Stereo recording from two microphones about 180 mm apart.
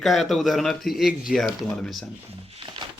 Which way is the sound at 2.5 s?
25° right (ahead or behind).